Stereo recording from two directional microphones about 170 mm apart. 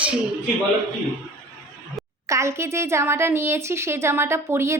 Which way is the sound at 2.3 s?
15° right (ahead or behind).